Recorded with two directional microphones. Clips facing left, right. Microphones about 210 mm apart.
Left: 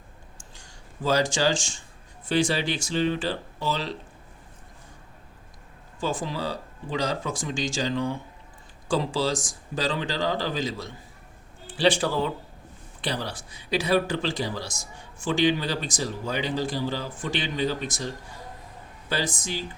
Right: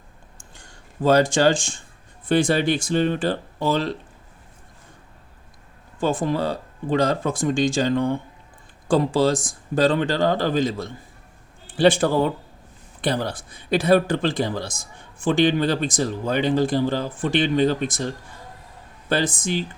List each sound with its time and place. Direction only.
0.5 s speech: 55° right (ahead or behind)
6.0 s speech: 55° right (ahead or behind)